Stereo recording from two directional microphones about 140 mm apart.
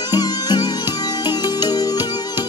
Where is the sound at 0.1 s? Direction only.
30° left (ahead or behind).